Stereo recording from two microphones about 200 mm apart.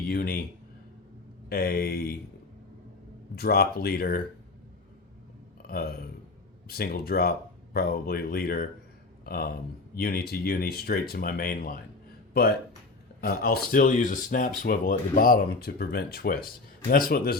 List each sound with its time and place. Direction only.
0.1 s speech: 50° left (ahead or behind)
1.5 s speech: 50° left (ahead or behind)
3.3 s speech: 50° left (ahead or behind)
5.6 s speech: 50° left (ahead or behind)